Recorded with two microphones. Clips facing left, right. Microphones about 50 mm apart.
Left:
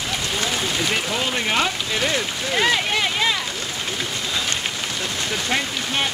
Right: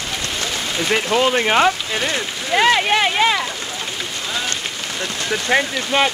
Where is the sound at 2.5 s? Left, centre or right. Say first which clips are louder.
Right 6 dB; right.